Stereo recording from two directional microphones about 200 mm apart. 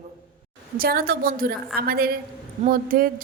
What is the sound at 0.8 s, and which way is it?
A woman's voice, 45° right (ahead or behind).